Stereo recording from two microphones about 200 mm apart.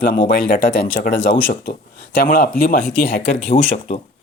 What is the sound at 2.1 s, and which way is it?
Speech, 45° left (ahead or behind).